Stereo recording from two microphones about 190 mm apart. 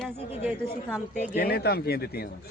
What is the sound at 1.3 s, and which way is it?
Speech, 55° left (ahead or behind).